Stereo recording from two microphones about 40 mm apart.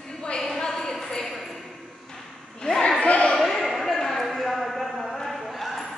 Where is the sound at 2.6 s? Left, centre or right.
Centre.